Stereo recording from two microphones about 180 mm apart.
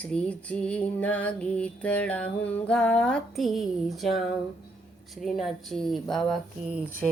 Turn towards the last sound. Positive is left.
turn(degrees=0)  # may be behind; listen again after turning